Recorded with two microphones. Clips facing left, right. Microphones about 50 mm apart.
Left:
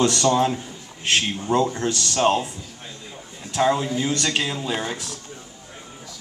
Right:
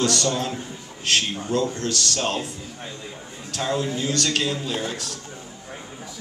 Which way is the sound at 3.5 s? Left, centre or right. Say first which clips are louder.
Left 5 dB; centre.